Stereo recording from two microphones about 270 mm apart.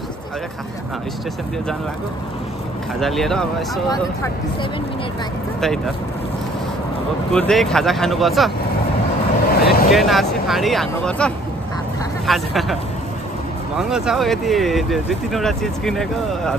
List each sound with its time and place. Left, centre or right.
3.0 s speech: centre
7.3 s speech: centre
9.5 s vehicle: left
9.8 s speech: centre
13.7 s speech: centre